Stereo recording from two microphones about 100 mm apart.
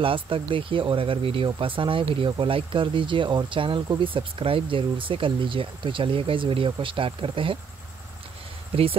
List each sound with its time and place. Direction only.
0.0 s speech: 60° right (ahead or behind)